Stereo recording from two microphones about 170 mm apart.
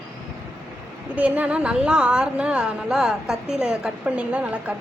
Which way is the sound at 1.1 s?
5° right (ahead or behind).